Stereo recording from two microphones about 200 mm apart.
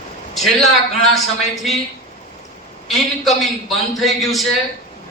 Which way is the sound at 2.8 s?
Centre (ahead or behind).